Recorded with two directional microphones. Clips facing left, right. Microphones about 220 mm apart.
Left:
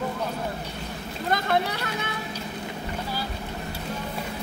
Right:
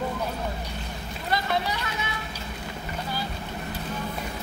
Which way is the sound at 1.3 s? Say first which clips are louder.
Left 2 dB; 55° left (ahead or behind).